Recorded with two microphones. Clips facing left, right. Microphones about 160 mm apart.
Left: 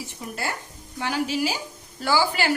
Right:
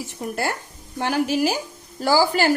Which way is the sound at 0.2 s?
55° right (ahead or behind).